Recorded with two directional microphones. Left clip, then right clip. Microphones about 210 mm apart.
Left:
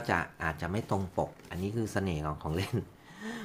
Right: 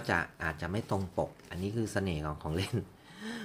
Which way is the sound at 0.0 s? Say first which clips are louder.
Left 1 dB; centre (ahead or behind).